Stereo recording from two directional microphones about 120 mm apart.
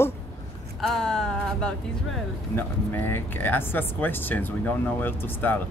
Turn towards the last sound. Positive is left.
turn(degrees=15)  # may be behind; listen again after turning